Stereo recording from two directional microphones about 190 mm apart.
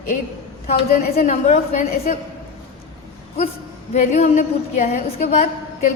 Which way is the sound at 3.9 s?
35° left (ahead or behind).